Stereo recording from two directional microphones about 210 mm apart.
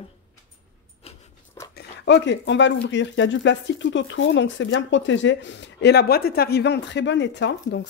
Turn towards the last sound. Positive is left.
turn(degrees=55)  # may be behind; listen again after turning